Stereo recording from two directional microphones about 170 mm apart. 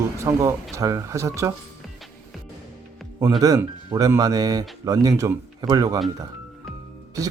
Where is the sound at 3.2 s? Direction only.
20° right (ahead or behind).